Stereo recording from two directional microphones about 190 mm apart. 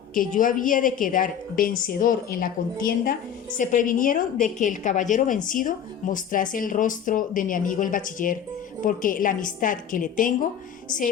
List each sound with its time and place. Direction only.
0.1 s a woman's voice: 45° left (ahead or behind)